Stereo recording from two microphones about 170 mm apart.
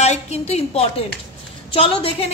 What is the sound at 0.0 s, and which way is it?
A woman's voice, 40° left (ahead or behind).